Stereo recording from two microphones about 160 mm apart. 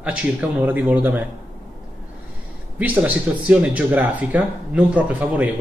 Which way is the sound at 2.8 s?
10° right (ahead or behind).